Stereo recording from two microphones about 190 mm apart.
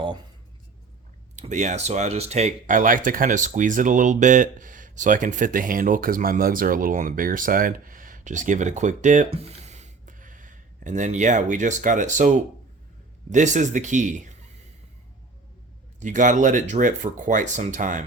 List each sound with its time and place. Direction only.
1.4 s speech: 40° right (ahead or behind)
16.0 s speech: 40° right (ahead or behind)